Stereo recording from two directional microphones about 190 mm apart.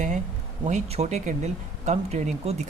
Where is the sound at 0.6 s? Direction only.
35° right (ahead or behind).